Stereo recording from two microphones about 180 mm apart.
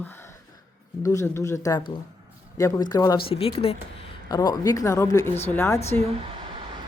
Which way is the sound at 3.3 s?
35° left (ahead or behind).